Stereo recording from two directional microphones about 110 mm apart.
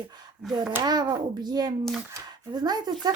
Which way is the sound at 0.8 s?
40° right (ahead or behind).